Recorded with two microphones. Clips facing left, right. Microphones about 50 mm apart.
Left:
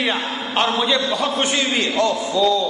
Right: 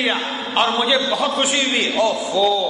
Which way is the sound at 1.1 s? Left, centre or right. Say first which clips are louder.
Right 1 dB; centre.